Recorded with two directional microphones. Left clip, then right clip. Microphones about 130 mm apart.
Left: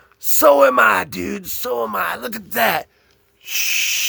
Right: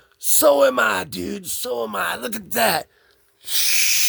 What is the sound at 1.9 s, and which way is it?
Speech, 55° right (ahead or behind).